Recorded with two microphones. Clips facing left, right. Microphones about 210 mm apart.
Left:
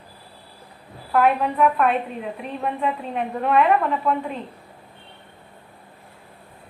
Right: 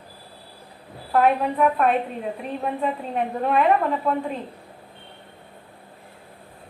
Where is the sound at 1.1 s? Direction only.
35° right (ahead or behind).